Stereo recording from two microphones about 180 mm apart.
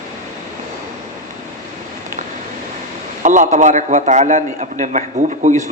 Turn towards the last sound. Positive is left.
turn(degrees=-45)  # may be behind; listen again after turning